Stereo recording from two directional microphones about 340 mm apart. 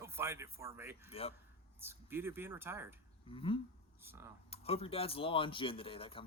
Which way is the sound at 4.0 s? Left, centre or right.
Centre.